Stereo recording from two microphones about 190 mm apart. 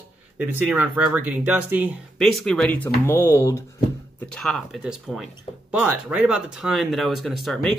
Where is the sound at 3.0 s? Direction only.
10° left (ahead or behind).